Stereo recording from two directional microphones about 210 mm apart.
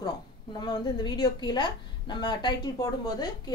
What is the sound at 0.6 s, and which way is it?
A woman's voice, 20° left (ahead or behind).